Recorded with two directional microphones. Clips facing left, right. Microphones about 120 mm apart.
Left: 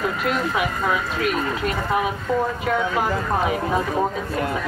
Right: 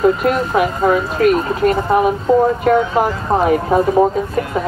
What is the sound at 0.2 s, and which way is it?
Speech, 45° right (ahead or behind).